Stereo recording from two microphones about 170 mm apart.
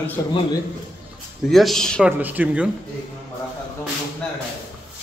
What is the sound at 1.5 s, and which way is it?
Speech, centre (ahead or behind).